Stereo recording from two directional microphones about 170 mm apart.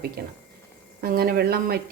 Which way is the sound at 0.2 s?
70° right (ahead or behind).